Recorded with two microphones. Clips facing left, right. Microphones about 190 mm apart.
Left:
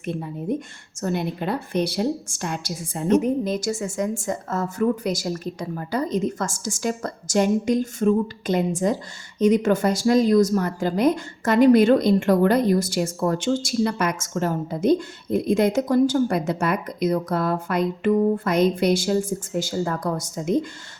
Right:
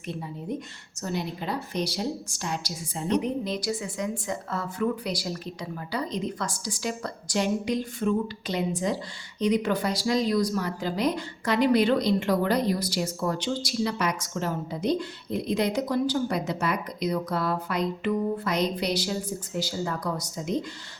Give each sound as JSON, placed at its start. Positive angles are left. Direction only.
{"t": 0.0, "sound": "speech", "side_deg": 55}